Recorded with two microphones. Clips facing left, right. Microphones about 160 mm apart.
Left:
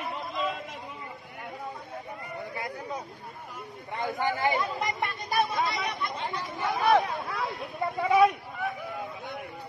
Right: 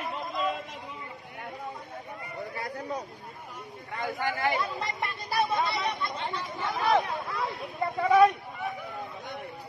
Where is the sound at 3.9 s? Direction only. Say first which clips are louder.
Left 2 dB; 20° left (ahead or behind).